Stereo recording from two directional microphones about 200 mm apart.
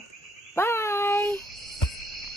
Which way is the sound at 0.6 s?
15° left (ahead or behind).